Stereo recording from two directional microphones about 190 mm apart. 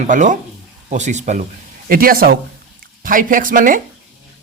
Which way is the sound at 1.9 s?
50° right (ahead or behind).